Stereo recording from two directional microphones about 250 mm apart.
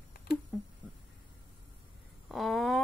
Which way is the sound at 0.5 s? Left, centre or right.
Centre.